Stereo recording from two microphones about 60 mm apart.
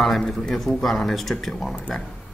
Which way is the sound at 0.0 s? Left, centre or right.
Centre.